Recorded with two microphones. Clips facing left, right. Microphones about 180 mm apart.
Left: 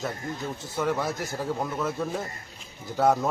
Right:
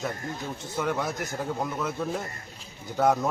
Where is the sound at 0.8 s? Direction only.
5° left (ahead or behind).